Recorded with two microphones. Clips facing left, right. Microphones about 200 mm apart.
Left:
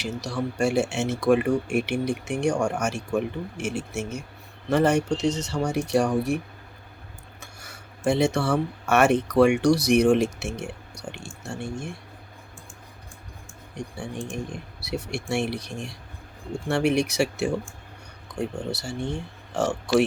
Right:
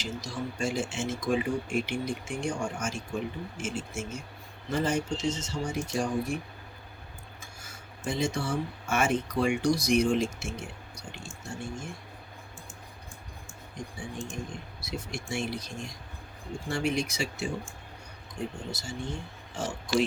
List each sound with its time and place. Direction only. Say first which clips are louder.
0.0 s speech: left 6 dB; 65° left (ahead or behind)
7.4 s speech: left 2 dB; 65° left (ahead or behind)
14.8 s speech: left 7 dB; 65° left (ahead or behind)